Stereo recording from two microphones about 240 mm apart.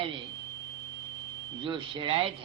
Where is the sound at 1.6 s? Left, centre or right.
Centre.